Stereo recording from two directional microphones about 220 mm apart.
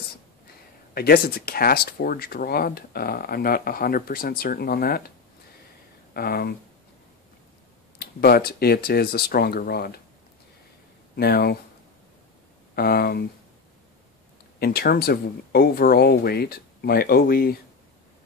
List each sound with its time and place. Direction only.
0.9 s speech: 45° left (ahead or behind)
6.1 s speech: 45° left (ahead or behind)
8.0 s speech: 45° left (ahead or behind)
11.1 s speech: 45° left (ahead or behind)
12.7 s speech: 45° left (ahead or behind)
14.6 s speech: 45° left (ahead or behind)